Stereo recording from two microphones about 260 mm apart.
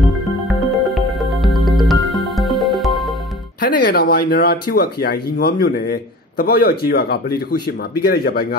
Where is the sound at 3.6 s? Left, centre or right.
Left.